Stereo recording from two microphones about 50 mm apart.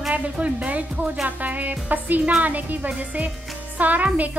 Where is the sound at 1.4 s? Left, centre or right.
Right.